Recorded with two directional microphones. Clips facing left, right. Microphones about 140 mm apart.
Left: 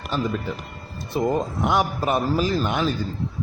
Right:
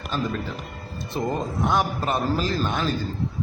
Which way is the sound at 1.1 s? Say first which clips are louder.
Left 4 dB; 15° left (ahead or behind).